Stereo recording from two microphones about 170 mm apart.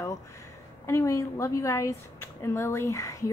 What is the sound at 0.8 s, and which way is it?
A woman's voice, 15° left (ahead or behind).